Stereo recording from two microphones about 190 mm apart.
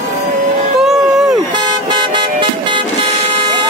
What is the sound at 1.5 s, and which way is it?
Vehicle, 25° right (ahead or behind).